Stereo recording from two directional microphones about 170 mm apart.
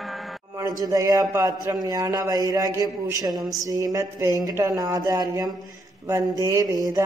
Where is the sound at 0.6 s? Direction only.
20° right (ahead or behind).